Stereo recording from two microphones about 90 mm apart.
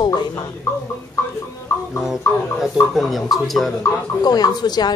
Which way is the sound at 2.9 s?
Centre (ahead or behind).